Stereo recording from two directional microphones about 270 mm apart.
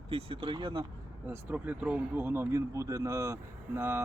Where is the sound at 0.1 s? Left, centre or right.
Right.